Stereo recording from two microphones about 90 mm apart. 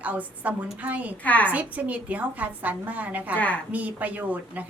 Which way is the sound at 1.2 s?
15° left (ahead or behind).